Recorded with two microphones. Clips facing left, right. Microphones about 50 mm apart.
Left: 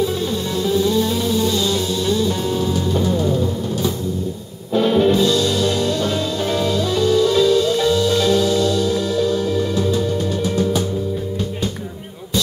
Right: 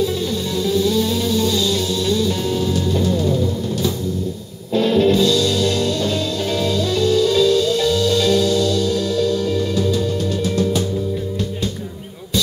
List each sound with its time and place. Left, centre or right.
0.6 s music: left